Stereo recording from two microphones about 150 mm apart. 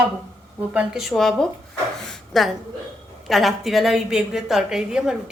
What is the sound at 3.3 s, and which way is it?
A woman's voice, centre (ahead or behind).